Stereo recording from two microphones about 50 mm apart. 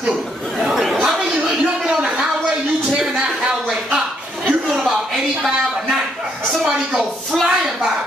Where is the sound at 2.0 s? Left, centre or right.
Centre.